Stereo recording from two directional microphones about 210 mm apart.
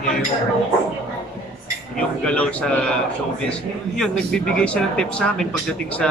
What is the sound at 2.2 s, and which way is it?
Speech, 5° left (ahead or behind).